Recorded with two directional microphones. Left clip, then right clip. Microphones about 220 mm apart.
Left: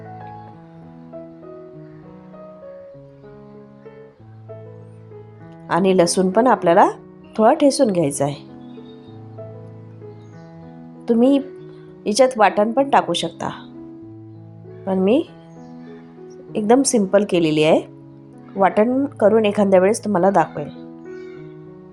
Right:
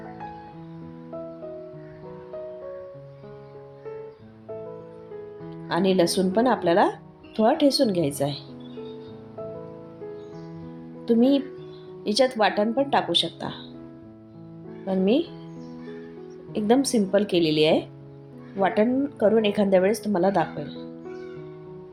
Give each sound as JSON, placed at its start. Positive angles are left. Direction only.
{"t": 5.6, "sound": "a woman's voice", "side_deg": 25}
{"t": 11.0, "sound": "a woman's voice", "side_deg": 25}
{"t": 14.8, "sound": "a woman's voice", "side_deg": 25}
{"t": 16.6, "sound": "a woman's voice", "side_deg": 25}